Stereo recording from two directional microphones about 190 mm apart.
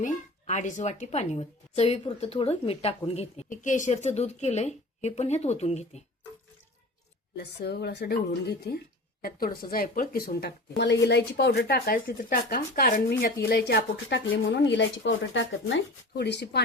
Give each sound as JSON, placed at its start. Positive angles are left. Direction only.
{"t": 0.0, "sound": "a woman's voice", "side_deg": 40}
{"t": 7.3, "sound": "a woman's voice", "side_deg": 60}